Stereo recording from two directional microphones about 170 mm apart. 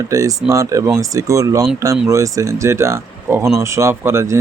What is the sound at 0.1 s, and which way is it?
Speech, 20° right (ahead or behind).